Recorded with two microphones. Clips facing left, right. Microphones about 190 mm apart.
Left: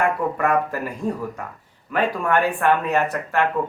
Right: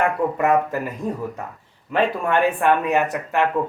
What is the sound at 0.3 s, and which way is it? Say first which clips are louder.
Speech: right 2 dB; 20° right (ahead or behind).